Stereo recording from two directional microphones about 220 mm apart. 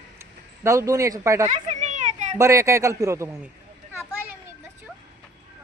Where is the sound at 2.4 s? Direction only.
15° right (ahead or behind).